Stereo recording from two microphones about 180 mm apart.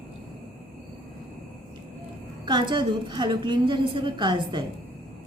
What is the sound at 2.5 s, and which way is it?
A woman's voice, 25° right (ahead or behind).